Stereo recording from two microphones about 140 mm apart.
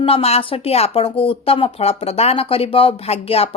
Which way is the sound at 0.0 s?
45° left (ahead or behind).